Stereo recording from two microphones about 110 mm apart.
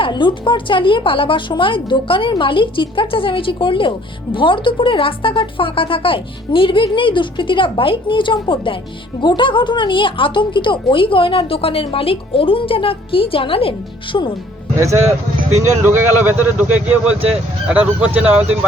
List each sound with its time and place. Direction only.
0.0 s a woman's voice: 45° left (ahead or behind)
14.8 s speech: 25° right (ahead or behind)